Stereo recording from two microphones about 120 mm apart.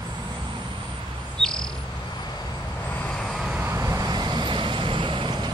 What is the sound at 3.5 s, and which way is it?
Vehicle, 20° right (ahead or behind).